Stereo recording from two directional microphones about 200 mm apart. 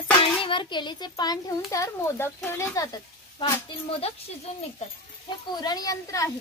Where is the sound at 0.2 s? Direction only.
25° left (ahead or behind).